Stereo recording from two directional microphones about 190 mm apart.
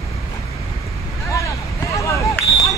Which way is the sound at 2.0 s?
15° left (ahead or behind).